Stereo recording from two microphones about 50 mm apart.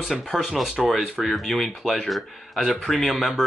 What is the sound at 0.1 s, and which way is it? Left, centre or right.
Speech, centre.